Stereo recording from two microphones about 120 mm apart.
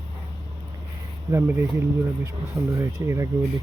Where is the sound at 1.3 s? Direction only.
20° right (ahead or behind).